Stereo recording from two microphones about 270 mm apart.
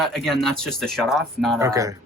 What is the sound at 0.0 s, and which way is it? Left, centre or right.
Speech, centre.